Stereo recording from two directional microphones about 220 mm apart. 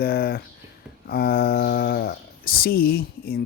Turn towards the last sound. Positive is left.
turn(degrees=45)  # may be behind; listen again after turning